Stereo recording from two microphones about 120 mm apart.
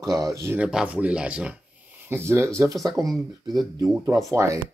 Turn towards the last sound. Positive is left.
turn(degrees=-25)  # may be behind; listen again after turning